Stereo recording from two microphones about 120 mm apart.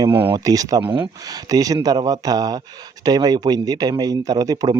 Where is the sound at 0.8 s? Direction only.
45° right (ahead or behind).